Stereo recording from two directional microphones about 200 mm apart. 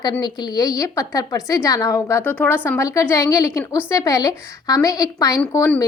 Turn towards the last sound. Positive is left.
turn(degrees=15)  # may be behind; listen again after turning